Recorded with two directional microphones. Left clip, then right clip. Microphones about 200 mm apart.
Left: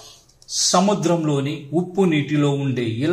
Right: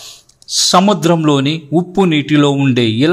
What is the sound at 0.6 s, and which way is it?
A man's voice, 35° right (ahead or behind).